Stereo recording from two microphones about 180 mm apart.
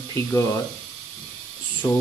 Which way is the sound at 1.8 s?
25° left (ahead or behind).